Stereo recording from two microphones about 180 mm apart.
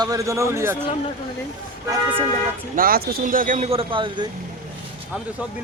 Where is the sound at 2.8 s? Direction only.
55° right (ahead or behind); by 4.2 s 25° right (ahead or behind).